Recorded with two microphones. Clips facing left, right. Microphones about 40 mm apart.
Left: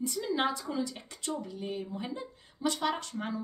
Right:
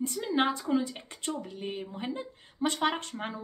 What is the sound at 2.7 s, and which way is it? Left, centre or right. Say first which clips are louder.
Speech: right 2 dB; right.